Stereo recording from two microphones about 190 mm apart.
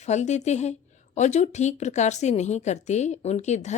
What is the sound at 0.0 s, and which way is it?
A woman's voice, 35° left (ahead or behind).